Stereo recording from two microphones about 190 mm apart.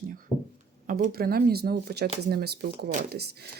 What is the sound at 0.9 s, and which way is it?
Speech, 50° right (ahead or behind).